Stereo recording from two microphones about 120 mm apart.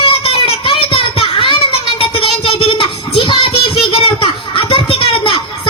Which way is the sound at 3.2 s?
45° left (ahead or behind).